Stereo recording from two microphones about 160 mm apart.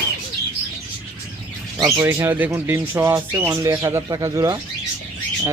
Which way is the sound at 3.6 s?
25° right (ahead or behind).